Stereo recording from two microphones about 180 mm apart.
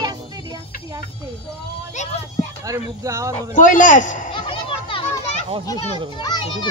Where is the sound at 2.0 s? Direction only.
40° left (ahead or behind).